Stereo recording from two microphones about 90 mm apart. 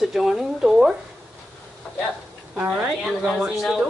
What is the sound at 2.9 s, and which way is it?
Speech, 5° right (ahead or behind).